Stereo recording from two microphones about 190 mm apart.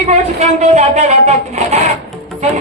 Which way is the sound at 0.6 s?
35° right (ahead or behind).